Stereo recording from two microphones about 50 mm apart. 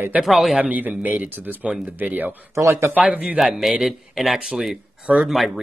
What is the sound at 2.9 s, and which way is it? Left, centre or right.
Speech, right.